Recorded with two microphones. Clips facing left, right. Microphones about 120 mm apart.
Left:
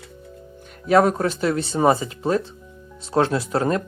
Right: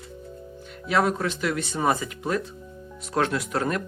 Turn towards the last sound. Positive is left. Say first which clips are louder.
# left 5 dB
turn(degrees=30)  # may be behind; listen again after turning